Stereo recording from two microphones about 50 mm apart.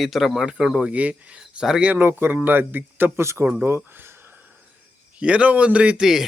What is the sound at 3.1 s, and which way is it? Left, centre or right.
Speech, right.